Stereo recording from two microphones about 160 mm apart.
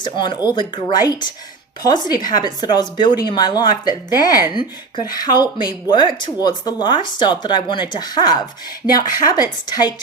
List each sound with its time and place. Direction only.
0.0 s speech: 30° left (ahead or behind)